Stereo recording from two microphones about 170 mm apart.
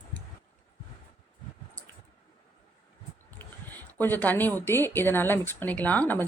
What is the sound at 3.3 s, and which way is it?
Speech, 10° left (ahead or behind).